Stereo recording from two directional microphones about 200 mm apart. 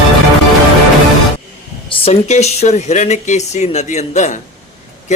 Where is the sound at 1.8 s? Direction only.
25° left (ahead or behind).